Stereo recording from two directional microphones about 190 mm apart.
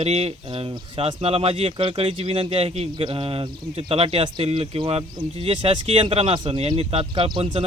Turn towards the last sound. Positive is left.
turn(degrees=-25)  # may be behind; listen again after turning